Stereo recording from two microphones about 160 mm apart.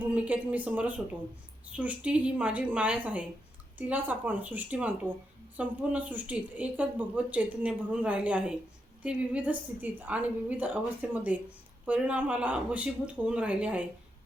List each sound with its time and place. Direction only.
0.0 s speech: 10° right (ahead or behind)